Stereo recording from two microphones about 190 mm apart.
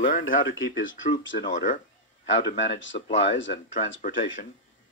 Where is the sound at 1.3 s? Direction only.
45° left (ahead or behind).